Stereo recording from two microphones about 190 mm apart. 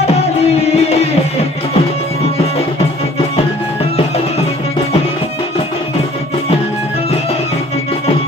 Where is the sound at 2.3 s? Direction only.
30° left (ahead or behind).